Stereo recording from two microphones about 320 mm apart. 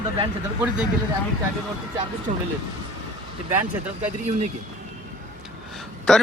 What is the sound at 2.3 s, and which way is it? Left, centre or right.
Speech, right.